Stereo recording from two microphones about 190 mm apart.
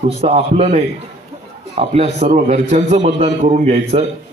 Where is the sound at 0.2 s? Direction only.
35° right (ahead or behind).